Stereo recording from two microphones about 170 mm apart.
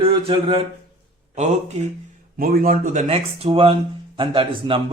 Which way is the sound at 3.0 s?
35° right (ahead or behind).